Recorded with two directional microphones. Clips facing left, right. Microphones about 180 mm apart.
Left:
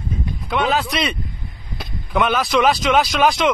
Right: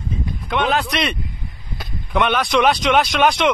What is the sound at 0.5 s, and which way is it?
Speech, centre (ahead or behind).